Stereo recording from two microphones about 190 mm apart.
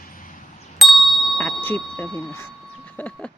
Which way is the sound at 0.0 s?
45° left (ahead or behind).